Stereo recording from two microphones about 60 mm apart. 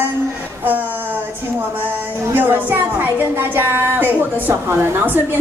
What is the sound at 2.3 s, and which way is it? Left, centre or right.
A woman's voice, right.